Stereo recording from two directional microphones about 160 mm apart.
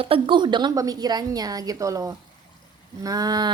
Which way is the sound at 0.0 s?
35° right (ahead or behind).